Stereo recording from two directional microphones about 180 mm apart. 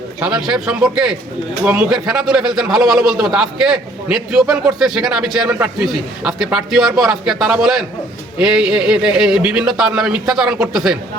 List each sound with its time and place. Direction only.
0.2 s a man's voice: 5° right (ahead or behind)